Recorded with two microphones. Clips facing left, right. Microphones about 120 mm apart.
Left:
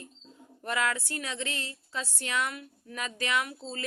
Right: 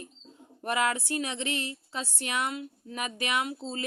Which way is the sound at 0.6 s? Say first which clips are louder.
Right 2 dB; 20° right (ahead or behind).